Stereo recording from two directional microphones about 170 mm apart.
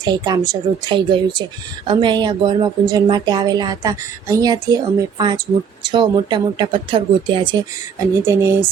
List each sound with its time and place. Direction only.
0.0 s a woman's voice: 25° right (ahead or behind)
7.9 s speech: 15° right (ahead or behind)